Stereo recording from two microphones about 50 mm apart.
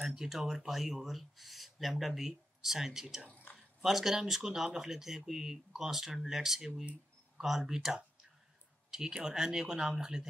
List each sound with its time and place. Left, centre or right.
0.0 s speech: centre
3.3 s a sound: left
3.5 s speech: centre